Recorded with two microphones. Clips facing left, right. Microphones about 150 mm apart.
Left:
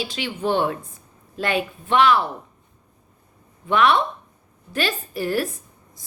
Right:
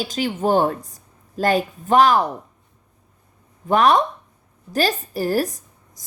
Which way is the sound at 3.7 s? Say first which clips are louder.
Right 2 dB; 40° right (ahead or behind).